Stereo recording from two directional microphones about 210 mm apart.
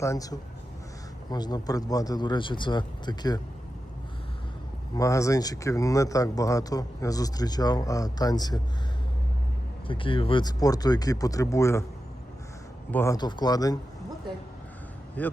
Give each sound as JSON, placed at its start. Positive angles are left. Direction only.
{"t": 0.0, "sound": "speech", "side_deg": 15}
{"t": 4.9, "sound": "speech", "side_deg": 15}
{"t": 9.8, "sound": "speech", "side_deg": 25}
{"t": 12.9, "sound": "speech", "side_deg": 10}
{"t": 15.2, "sound": "speech", "side_deg": 10}